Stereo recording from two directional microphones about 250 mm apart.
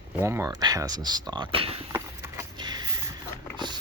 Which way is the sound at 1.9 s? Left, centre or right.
Centre.